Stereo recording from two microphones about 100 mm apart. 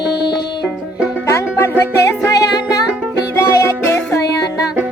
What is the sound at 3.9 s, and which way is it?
Music, 25° left (ahead or behind).